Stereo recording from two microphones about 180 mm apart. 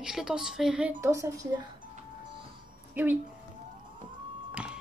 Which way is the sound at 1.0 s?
15° right (ahead or behind).